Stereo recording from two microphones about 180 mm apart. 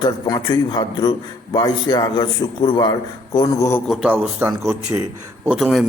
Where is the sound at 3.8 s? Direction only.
5° right (ahead or behind).